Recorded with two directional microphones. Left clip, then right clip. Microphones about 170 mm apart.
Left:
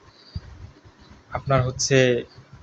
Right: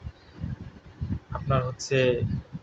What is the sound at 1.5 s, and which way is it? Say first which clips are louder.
Speech: left 6 dB; 25° left (ahead or behind).